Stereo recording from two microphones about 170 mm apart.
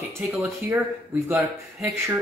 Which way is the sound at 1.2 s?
15° right (ahead or behind).